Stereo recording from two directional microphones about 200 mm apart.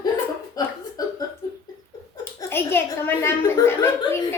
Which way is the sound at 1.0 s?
20° left (ahead or behind).